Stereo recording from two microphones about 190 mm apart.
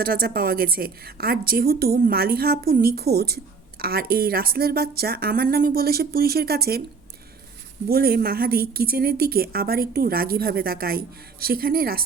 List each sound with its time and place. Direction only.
0.0 s a woman's voice: 50° right (ahead or behind)
7.9 s a woman's voice: 55° right (ahead or behind)